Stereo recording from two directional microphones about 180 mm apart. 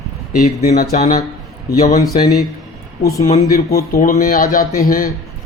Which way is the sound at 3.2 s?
40° left (ahead or behind).